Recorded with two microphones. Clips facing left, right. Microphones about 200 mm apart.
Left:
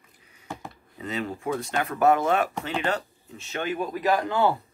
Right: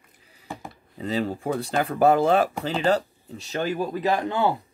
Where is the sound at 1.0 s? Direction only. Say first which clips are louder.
Right 5 dB; 30° right (ahead or behind).